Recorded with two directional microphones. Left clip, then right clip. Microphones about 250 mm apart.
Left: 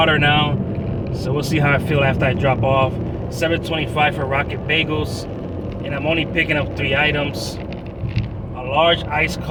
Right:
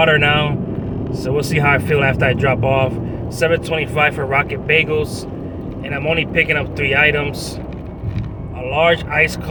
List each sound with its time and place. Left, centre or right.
0.0 s speech: centre
8.7 s speech: centre